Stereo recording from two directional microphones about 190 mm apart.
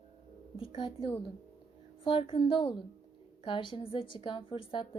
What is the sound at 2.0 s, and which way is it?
A woman's voice, 25° left (ahead or behind).